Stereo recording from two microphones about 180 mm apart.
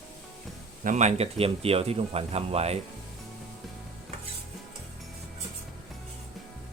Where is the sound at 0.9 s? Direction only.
40° right (ahead or behind).